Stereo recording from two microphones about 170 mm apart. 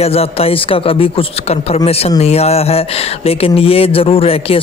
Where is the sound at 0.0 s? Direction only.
35° left (ahead or behind).